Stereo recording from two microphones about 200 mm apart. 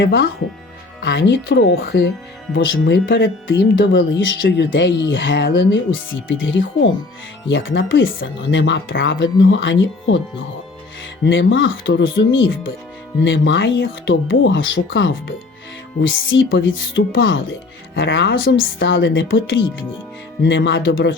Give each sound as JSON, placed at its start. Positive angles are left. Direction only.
{"t": 0.0, "sound": "speech", "side_deg": 70}
{"t": 1.8, "sound": "speech", "side_deg": 55}
{"t": 11.2, "sound": "speech", "side_deg": 65}